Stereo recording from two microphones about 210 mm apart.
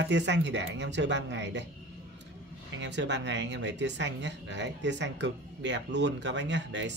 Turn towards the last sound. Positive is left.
turn(degrees=-60)  # may be behind; listen again after turning